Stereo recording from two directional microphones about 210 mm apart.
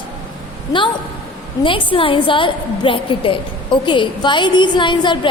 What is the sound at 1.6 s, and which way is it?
A woman's voice, 25° left (ahead or behind).